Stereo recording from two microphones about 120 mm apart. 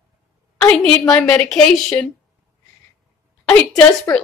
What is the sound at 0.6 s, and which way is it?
A woman's voice, 5° left (ahead or behind).